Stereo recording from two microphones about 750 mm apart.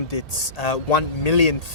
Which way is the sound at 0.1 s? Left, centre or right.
Left.